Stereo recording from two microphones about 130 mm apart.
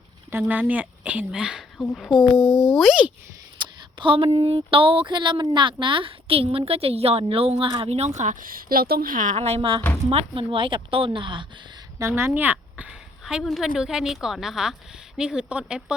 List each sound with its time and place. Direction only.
0.3 s speech: 15° right (ahead or behind)
3.6 s speech: 40° right (ahead or behind)
7.9 s a woman's voice: 55° right (ahead or behind); by 9.3 s 85° right
9.3 s a woman's voice: 55° right (ahead or behind); by 11.4 s 40° right (ahead or behind)
11.9 s a woman's voice: 20° right (ahead or behind)